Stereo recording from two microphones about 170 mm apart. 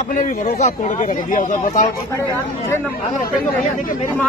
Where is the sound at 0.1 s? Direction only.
45° left (ahead or behind).